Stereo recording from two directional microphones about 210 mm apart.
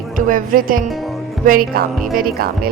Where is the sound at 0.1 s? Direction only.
40° right (ahead or behind).